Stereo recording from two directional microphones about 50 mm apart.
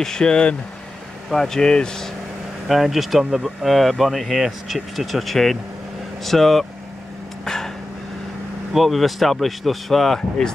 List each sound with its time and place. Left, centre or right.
0.0 s speech: centre
1.3 s speech: centre
2.7 s speech: centre
7.4 s a sound: centre
8.7 s speech: centre